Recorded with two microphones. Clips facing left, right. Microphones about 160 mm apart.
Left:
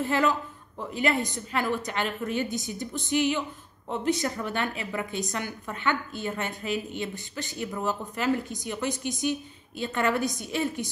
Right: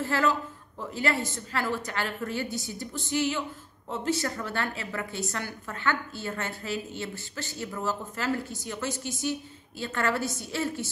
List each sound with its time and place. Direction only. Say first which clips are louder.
0.0 s a woman's voice: left 1 dB; 20° left (ahead or behind)